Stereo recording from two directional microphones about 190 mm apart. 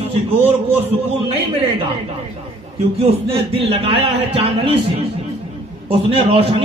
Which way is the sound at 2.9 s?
30° right (ahead or behind).